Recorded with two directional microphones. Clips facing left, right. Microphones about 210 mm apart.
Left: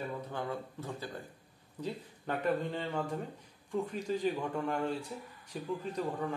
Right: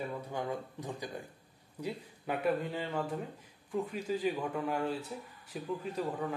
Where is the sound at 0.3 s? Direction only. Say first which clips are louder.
Right 1 dB; 15° right (ahead or behind).